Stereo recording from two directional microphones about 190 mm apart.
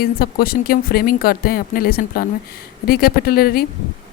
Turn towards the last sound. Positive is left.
turn(degrees=50)  # may be behind; listen again after turning